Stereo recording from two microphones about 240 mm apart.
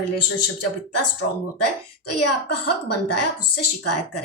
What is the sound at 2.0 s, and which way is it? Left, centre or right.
A woman's voice, left.